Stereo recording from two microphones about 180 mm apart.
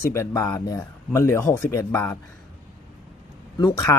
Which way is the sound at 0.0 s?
15° left (ahead or behind).